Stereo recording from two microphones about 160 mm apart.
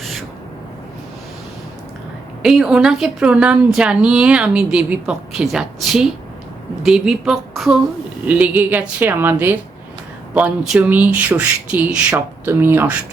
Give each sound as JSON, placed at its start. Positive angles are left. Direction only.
{"t": 2.4, "sound": "a woman's voice", "side_deg": -5}